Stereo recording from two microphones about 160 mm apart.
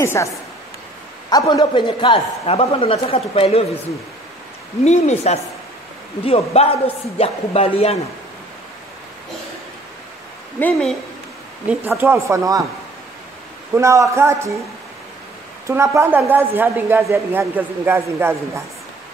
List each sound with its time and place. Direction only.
0.0 s a woman's voice: 15° left (ahead or behind)
1.3 s a man's voice: 25° left (ahead or behind)
4.8 s a woman's voice: 45° left (ahead or behind)
10.6 s a woman's voice: 5° left (ahead or behind)
11.7 s a woman's voice: 10° right (ahead or behind)
13.7 s a man's voice: 20° right (ahead or behind)
15.6 s a woman's voice: 20° right (ahead or behind)